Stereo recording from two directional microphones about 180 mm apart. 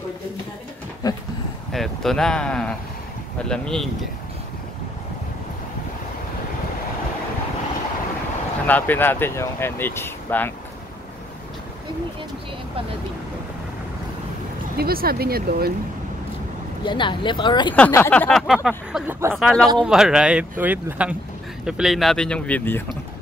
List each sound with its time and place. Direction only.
1.0 s a sound: 20° left (ahead or behind)
1.7 s speech: centre (ahead or behind)
8.6 s speech: 10° left (ahead or behind)
14.8 s speech: 55° right (ahead or behind)
16.8 s speech: 25° left (ahead or behind)
17.7 s speech: 10° left (ahead or behind); by 19.3 s 10° right (ahead or behind)
19.3 s speech: centre (ahead or behind)